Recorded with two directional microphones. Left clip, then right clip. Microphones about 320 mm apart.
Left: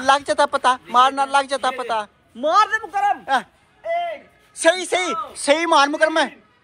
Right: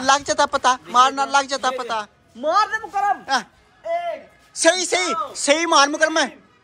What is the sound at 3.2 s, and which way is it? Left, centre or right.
Speech, centre.